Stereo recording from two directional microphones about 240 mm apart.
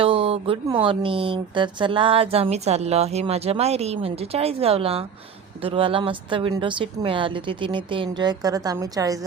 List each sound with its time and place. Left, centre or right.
0.0 s speech: right